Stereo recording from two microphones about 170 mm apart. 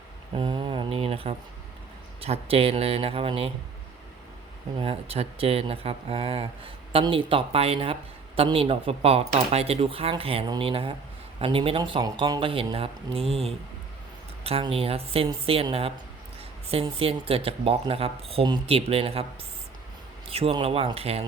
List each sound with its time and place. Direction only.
0.3 s speech: 30° right (ahead or behind)
4.8 s speech: 35° right (ahead or behind)
20.2 s speech: 35° right (ahead or behind)